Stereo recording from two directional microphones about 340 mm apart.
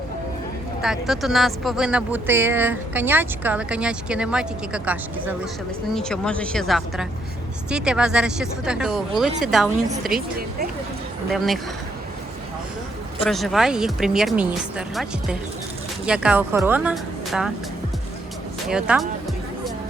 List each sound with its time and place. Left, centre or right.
0.8 s speech: centre
10.2 s speech: right
11.3 s speech: centre
13.2 s speech: centre
18.7 s speech: centre